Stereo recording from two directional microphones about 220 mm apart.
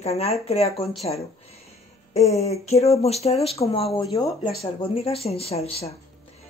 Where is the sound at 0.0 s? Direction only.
30° left (ahead or behind).